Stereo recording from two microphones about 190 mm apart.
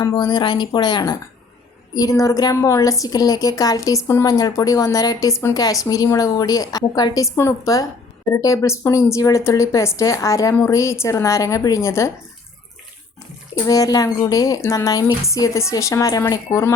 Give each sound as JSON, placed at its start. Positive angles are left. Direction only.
{"t": 0.0, "sound": "a woman's voice", "side_deg": 20}
{"t": 13.7, "sound": "a woman's voice", "side_deg": 20}